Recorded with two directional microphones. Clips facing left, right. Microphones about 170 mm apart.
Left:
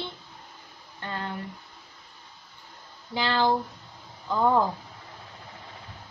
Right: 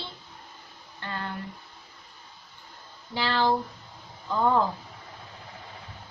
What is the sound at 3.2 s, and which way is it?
Speech, centre (ahead or behind).